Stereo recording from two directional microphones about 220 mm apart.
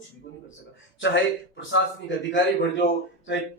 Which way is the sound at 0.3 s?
55° left (ahead or behind).